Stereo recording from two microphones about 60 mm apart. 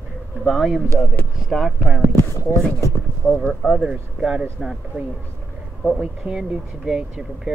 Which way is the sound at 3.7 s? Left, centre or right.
Centre.